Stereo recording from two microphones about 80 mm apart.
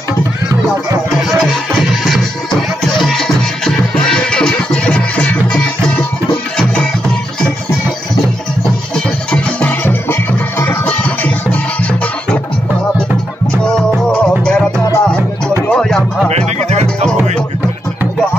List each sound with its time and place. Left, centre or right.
2.0 s music: centre
8.9 s music: centre
9.7 s music: left
14.4 s music: centre